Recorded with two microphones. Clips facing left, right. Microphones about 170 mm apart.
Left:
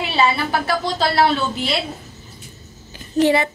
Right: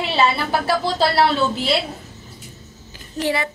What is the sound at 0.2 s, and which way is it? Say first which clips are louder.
A woman's voice: left 1 dB; 5° right (ahead or behind).